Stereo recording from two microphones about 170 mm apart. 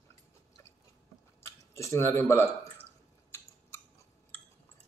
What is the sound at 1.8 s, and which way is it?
Speech, 15° left (ahead or behind).